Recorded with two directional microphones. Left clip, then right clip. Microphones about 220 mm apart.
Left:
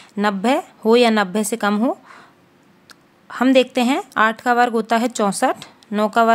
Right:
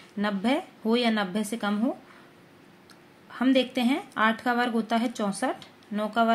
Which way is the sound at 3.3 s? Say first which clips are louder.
Left 9 dB; 40° left (ahead or behind).